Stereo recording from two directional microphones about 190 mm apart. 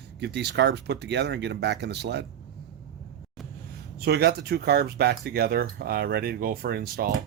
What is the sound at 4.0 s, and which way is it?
Speech, 60° right (ahead or behind).